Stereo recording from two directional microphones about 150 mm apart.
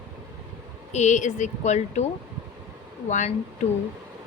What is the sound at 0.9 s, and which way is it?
Speech, 50° left (ahead or behind).